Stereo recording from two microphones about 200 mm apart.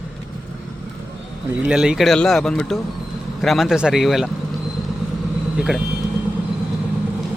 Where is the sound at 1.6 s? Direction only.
5° right (ahead or behind).